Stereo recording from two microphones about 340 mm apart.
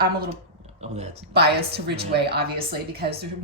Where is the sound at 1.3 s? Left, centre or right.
Right.